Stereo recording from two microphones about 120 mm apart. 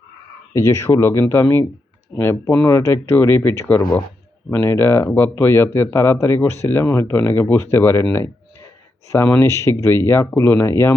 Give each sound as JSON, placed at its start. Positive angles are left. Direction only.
{"t": 0.5, "sound": "speech", "side_deg": 25}